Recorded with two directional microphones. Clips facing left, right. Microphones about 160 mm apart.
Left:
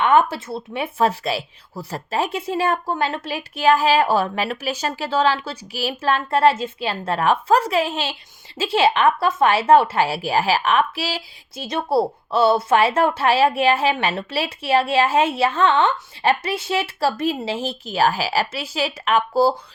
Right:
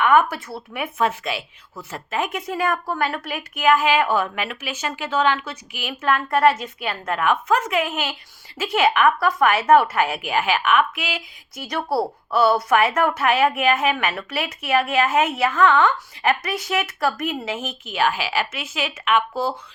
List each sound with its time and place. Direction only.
0.0 s a woman's voice: 25° left (ahead or behind)